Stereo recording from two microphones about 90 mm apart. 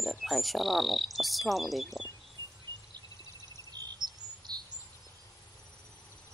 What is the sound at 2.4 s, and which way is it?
Wind chime, 50° right (ahead or behind).